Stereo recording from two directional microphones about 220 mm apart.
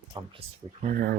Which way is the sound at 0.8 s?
40° right (ahead or behind).